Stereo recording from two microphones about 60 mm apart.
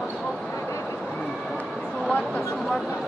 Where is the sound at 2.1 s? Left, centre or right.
Left.